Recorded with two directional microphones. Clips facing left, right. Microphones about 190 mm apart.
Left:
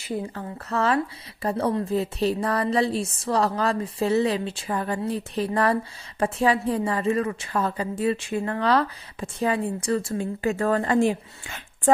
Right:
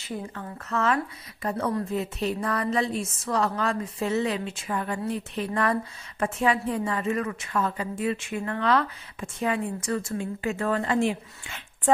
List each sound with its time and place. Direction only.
0.3 s a woman's voice: 35° left (ahead or behind)